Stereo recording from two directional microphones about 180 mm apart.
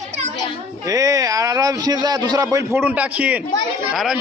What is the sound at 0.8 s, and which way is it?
A man's voice, 20° right (ahead or behind).